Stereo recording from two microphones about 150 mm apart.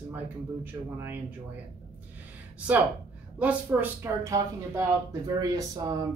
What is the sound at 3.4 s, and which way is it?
Speech, 10° right (ahead or behind).